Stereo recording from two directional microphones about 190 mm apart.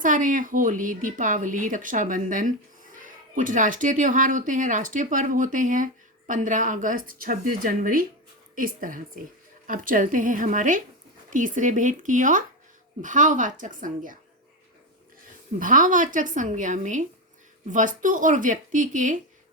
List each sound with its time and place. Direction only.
0.0 s speech: 45° right (ahead or behind)
15.5 s speech: 45° right (ahead or behind)